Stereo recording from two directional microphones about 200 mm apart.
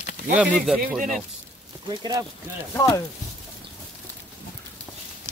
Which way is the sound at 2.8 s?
15° left (ahead or behind).